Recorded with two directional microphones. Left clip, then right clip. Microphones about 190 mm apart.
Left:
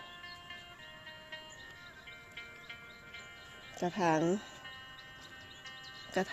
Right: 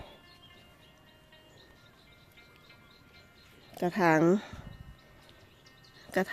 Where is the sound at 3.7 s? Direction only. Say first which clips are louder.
Right 5 dB; 25° right (ahead or behind).